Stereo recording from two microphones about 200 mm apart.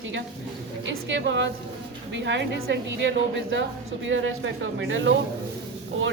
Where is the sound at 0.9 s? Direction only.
65° right (ahead or behind).